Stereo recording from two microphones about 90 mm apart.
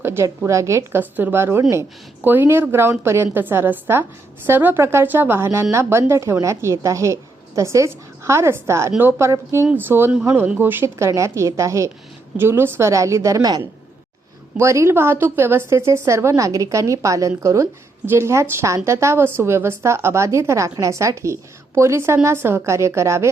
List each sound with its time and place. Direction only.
0.0 s a woman's voice: 30° right (ahead or behind)
0.9 s a woman's voice: 20° right (ahead or behind); by 13.6 s 40° right (ahead or behind)
14.6 s a woman's voice: 30° right (ahead or behind)